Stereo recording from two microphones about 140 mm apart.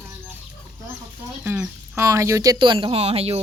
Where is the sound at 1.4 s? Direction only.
10° right (ahead or behind).